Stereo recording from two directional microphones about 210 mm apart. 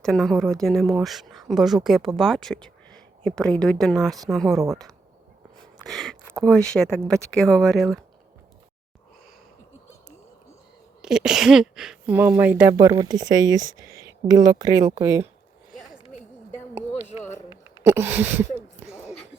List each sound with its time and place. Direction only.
0.0 s speech: centre (ahead or behind)
11.0 s speech: 5° right (ahead or behind)
17.5 s speech: 10° right (ahead or behind)